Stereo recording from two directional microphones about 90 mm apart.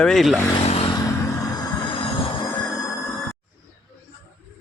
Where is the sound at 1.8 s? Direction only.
80° left.